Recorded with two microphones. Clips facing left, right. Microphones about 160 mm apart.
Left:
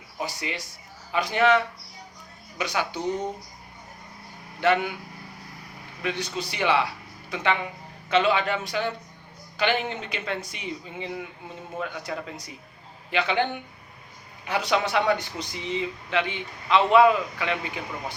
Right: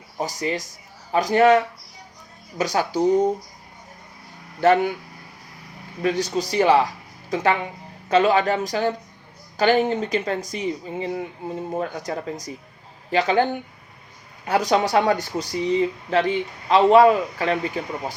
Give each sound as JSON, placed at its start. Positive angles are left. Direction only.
{"t": 0.2, "sound": "speech", "side_deg": -40}
{"t": 4.6, "sound": "speech", "side_deg": -40}
{"t": 6.0, "sound": "speech", "side_deg": -40}
{"t": 14.4, "sound": "speech", "side_deg": -40}